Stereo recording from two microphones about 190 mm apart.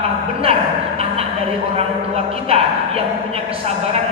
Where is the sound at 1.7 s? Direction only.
30° right (ahead or behind).